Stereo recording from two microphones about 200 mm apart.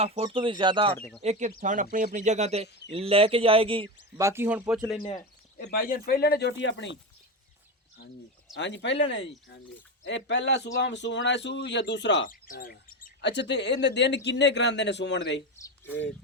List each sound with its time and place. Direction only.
0.0 s speech: 30° right (ahead or behind)
0.9 s speech: centre (ahead or behind)
1.2 s speech: 35° right (ahead or behind)
4.2 s speech: 15° right (ahead or behind)
5.5 s speech: 45° left (ahead or behind); by 6.9 s 65° left (ahead or behind)
8.5 s a man's voice: 65° left (ahead or behind)
12.3 s a man's voice: 45° left (ahead or behind); by 15.4 s 60° left (ahead or behind)